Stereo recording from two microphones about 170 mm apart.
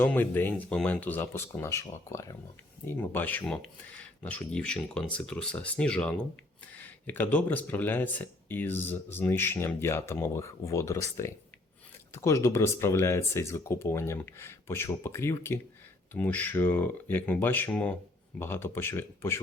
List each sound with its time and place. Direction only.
0.0 s speech: 10° left (ahead or behind)
12.1 s speech: 15° left (ahead or behind)